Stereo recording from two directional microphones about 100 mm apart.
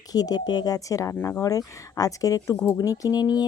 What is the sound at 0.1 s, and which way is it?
Speech, 40° left (ahead or behind).